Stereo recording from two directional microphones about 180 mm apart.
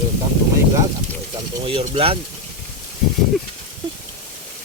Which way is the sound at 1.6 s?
30° right (ahead or behind).